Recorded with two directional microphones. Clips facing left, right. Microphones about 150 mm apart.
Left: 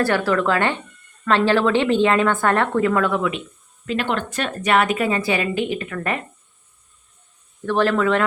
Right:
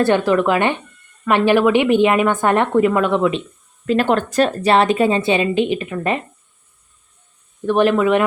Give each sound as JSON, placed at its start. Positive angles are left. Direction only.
{"t": 0.0, "sound": "a woman's voice", "side_deg": -20}
{"t": 3.8, "sound": "a woman's voice", "side_deg": -45}
{"t": 7.6, "sound": "a woman's voice", "side_deg": -20}